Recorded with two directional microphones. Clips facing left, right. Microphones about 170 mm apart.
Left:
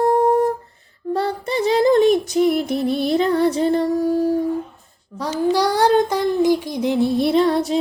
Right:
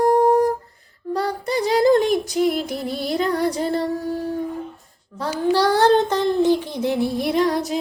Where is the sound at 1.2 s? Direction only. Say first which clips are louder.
Left 1 dB; 25° left (ahead or behind).